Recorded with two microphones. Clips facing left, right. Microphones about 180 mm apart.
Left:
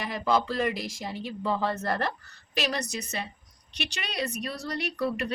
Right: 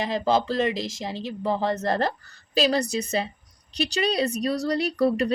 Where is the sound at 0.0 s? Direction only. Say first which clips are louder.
Right 4 dB; 25° right (ahead or behind).